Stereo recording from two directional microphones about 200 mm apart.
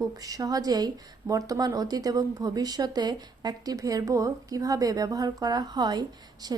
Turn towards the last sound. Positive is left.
turn(degrees=-20)  # may be behind; listen again after turning